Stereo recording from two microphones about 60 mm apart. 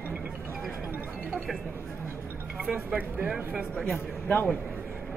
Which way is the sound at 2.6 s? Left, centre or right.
Centre.